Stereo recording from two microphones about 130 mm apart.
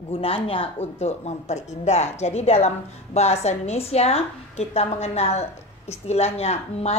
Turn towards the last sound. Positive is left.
turn(degrees=55)  # may be behind; listen again after turning